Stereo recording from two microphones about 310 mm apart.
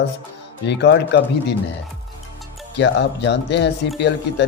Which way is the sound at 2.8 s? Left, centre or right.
Left.